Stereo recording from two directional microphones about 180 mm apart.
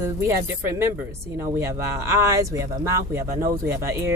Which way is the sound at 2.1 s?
15° right (ahead or behind).